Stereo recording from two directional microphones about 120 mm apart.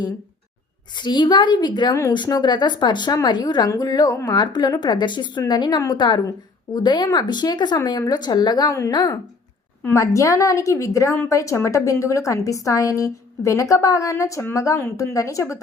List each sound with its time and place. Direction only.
0.9 s a woman's voice: 40° left (ahead or behind)
9.9 s a woman's voice: 25° left (ahead or behind)